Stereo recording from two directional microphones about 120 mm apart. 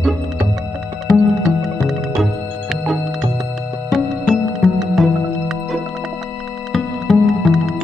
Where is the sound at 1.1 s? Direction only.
Centre (ahead or behind).